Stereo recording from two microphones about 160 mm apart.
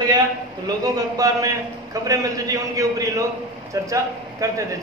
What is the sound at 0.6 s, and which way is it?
A man's voice, 20° right (ahead or behind).